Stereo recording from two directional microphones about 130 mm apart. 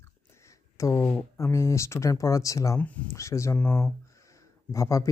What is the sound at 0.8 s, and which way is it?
Speech, 20° left (ahead or behind).